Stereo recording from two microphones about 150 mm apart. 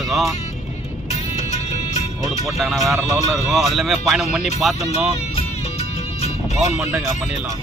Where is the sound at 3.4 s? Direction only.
Centre (ahead or behind).